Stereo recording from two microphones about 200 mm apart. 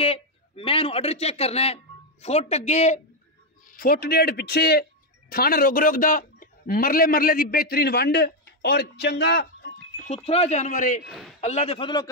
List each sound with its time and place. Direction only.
0.0 s a man's voice: 30° left (ahead or behind)
3.7 s a man's voice: 50° left (ahead or behind)
10.0 s speech: 30° left (ahead or behind)
11.1 s a man's voice: centre (ahead or behind)
11.4 s a man's voice: 30° left (ahead or behind)